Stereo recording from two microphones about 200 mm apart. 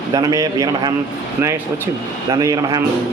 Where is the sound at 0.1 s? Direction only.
20° right (ahead or behind).